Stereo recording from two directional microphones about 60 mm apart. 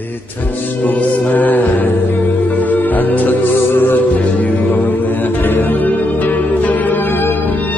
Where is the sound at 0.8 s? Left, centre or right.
Left.